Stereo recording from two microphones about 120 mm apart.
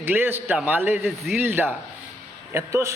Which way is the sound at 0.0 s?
15° right (ahead or behind).